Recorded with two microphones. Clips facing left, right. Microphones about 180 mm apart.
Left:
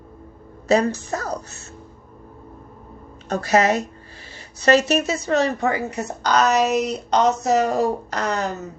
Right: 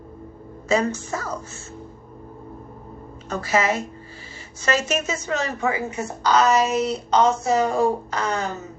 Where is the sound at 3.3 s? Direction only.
40° left (ahead or behind).